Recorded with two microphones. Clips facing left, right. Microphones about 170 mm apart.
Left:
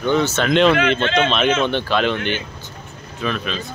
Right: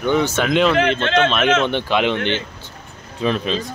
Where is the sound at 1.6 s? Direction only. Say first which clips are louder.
Even; 15° right (ahead or behind).